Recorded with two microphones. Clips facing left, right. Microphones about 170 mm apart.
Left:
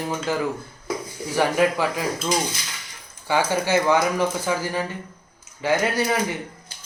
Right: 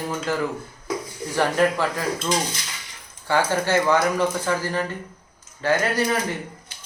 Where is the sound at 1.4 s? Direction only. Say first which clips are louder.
Even; 10° left (ahead or behind).